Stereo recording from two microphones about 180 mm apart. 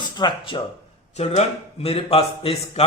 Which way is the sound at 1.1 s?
35° left (ahead or behind).